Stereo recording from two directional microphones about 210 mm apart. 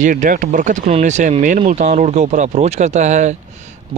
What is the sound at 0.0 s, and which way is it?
Speech, 40° right (ahead or behind).